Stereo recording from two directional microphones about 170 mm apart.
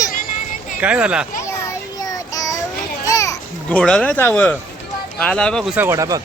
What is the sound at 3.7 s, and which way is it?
Speech, 5° left (ahead or behind).